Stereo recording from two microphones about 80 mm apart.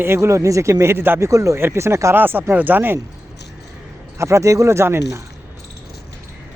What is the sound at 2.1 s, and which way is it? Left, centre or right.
Speech, right.